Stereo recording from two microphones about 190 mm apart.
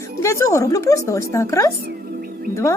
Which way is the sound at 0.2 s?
15° left (ahead or behind).